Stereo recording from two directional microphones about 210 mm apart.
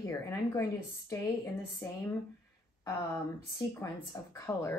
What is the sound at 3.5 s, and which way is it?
A woman's voice, 15° left (ahead or behind).